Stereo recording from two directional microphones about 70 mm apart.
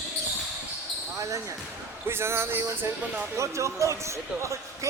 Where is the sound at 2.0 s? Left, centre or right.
Right.